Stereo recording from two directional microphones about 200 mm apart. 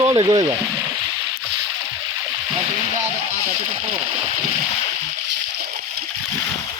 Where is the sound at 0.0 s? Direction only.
20° right (ahead or behind).